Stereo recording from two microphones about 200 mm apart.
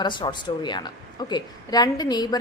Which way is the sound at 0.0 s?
25° left (ahead or behind).